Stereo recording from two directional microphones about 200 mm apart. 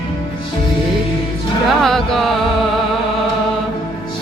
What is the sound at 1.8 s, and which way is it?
Music, centre (ahead or behind).